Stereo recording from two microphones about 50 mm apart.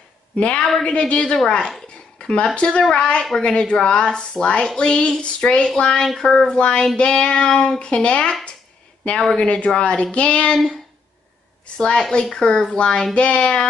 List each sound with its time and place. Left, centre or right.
0.4 s a woman's voice: left
6.4 s a woman's voice: centre
9.4 s speech: left
11.6 s a woman's voice: centre